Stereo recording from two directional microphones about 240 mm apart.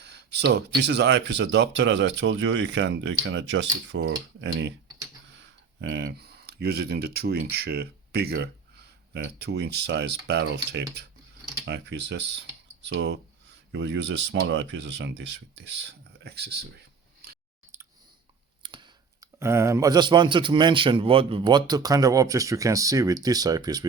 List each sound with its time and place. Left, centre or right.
0.0 s speech: right
18.6 s speech: centre